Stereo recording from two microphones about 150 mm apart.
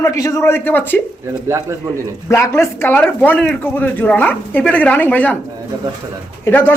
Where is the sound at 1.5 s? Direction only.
20° right (ahead or behind).